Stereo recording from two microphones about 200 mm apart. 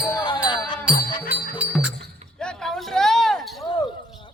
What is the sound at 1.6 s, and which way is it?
Music, 5° right (ahead or behind).